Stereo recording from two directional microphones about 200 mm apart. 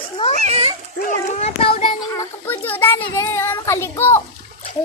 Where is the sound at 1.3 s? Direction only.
30° left (ahead or behind).